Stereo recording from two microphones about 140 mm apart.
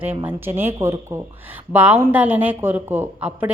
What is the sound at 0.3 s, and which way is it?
A woman's voice, 15° right (ahead or behind).